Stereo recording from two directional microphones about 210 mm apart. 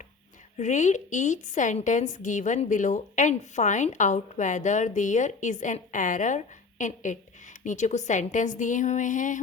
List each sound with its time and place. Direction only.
0.5 s a woman's voice: 35° left (ahead or behind)